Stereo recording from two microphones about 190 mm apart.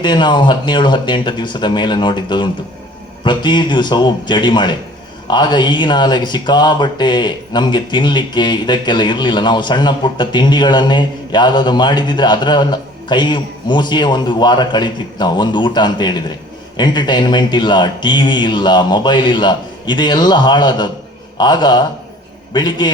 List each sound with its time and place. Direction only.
0.0 s speech: 25° left (ahead or behind)